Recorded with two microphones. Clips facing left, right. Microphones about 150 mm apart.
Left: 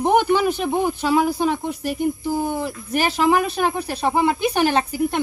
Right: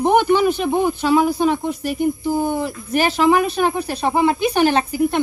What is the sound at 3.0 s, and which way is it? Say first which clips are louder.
Speech: right 2 dB; 5° left (ahead or behind).